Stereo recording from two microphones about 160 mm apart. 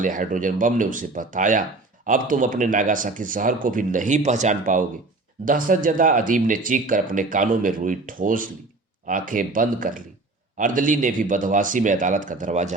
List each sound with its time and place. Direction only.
0.0 s a man's voice: 55° right (ahead or behind)